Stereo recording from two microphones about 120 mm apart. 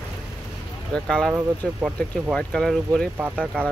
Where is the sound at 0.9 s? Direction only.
5° left (ahead or behind).